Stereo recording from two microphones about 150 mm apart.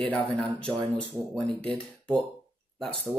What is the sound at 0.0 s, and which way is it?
Speech, 5° left (ahead or behind).